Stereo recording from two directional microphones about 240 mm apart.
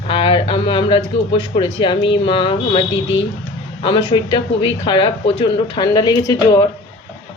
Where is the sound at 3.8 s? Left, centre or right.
Left.